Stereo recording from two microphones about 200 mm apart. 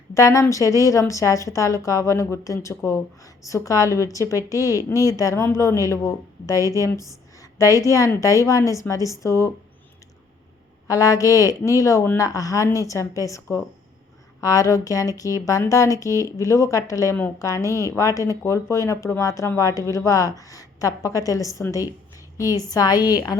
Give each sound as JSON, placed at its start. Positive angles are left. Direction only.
{"t": 0.1, "sound": "speech", "side_deg": 15}
{"t": 10.8, "sound": "a woman's voice", "side_deg": 15}